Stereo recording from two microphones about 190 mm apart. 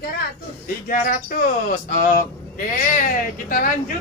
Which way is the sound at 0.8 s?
45° left (ahead or behind).